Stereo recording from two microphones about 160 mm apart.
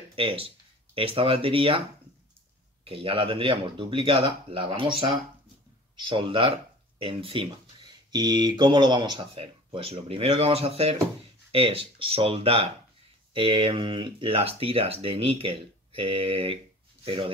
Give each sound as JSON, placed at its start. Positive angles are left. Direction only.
{"t": 0.1, "sound": "speech", "side_deg": -35}
{"t": 2.8, "sound": "speech", "side_deg": -35}